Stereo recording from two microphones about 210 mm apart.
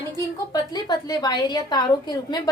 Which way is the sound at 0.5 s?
20° left (ahead or behind).